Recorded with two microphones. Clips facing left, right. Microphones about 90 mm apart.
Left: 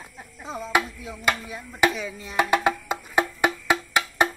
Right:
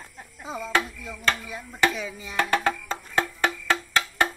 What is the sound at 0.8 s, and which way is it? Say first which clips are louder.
Music: left 1 dB; centre (ahead or behind).